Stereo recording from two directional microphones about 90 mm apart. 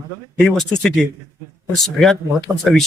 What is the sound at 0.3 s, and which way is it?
Speech, 5° left (ahead or behind).